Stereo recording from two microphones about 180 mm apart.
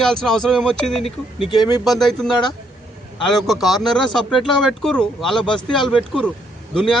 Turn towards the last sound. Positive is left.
turn(degrees=5)  # may be behind; listen again after turning